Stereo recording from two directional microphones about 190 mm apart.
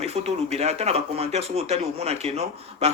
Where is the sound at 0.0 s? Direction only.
35° right (ahead or behind).